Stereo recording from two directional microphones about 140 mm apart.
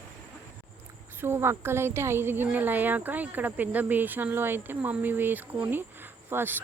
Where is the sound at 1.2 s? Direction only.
15° right (ahead or behind).